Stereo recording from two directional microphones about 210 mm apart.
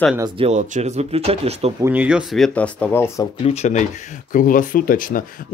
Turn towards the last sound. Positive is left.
turn(degrees=40)  # may be behind; listen again after turning